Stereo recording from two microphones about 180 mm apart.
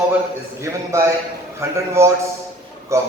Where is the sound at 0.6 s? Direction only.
15° right (ahead or behind).